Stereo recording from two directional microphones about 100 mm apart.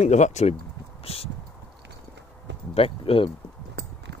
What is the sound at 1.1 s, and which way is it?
Speech, 80° left.